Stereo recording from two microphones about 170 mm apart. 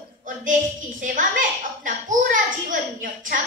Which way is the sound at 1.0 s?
50° right (ahead or behind).